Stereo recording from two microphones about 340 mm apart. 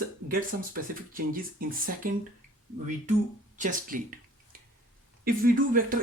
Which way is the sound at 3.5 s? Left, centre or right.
Right.